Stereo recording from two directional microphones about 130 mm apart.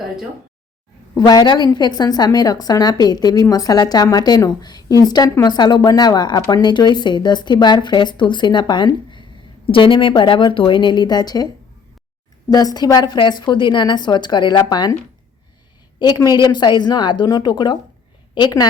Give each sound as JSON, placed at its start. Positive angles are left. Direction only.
{"t": 1.1, "sound": "a woman's voice", "side_deg": 30}
{"t": 12.5, "sound": "a woman's voice", "side_deg": 30}
{"t": 16.0, "sound": "a woman's voice", "side_deg": 30}